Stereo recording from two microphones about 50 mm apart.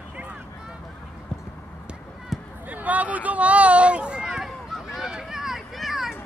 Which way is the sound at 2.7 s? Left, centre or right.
Right.